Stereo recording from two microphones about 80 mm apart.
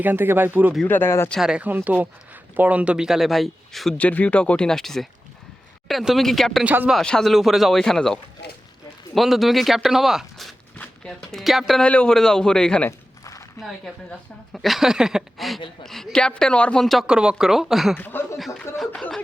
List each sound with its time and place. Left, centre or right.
0.0 s speech: right
0.9 s speech: left
1.4 s speech: centre
1.6 s speech: right; by 3.9 s centre
3.9 s a man's voice: centre
6.7 s speech: centre
7.0 s a woman's voice: centre
11.8 s a man's voice: centre
17.1 s a woman's voice: centre
17.9 s speech: left